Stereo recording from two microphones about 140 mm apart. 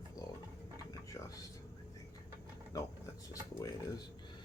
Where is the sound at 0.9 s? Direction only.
25° left (ahead or behind).